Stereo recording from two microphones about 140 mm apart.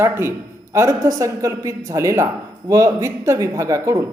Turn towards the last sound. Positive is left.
turn(degrees=-20)  # may be behind; listen again after turning